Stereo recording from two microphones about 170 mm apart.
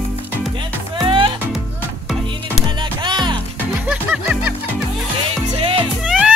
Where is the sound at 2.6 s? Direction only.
25° right (ahead or behind).